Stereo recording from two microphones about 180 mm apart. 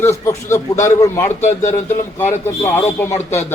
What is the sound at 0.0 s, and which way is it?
A man's voice, 15° left (ahead or behind).